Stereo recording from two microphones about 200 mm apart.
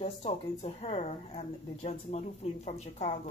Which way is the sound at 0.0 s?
30° left (ahead or behind).